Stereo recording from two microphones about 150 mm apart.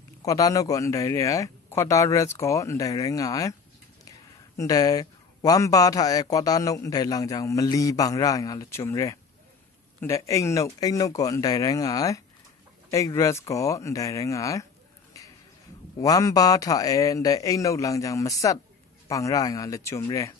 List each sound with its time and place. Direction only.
0.2 s speech: 25° left (ahead or behind)
4.6 s speech: 25° left (ahead or behind)
16.0 s speech: 20° left (ahead or behind)